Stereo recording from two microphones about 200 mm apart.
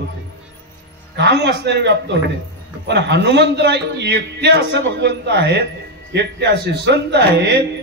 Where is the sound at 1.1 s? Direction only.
60° right (ahead or behind).